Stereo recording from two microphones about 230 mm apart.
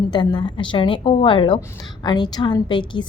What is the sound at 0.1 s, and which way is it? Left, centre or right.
A woman's voice, centre.